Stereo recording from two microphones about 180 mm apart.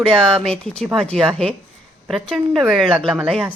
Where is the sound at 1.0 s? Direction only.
5° left (ahead or behind).